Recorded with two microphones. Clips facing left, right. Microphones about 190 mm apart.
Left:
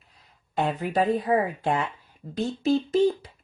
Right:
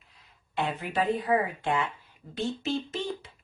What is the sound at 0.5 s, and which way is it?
Speech, 40° left (ahead or behind).